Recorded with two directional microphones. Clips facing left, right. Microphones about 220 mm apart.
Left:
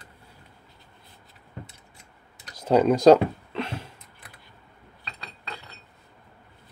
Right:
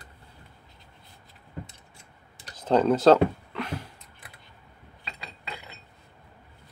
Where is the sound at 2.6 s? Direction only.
10° left (ahead or behind).